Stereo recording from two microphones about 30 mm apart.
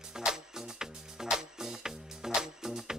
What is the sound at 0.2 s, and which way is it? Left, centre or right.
Music, right.